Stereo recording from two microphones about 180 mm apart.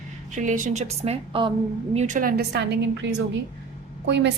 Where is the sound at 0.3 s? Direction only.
45° right (ahead or behind).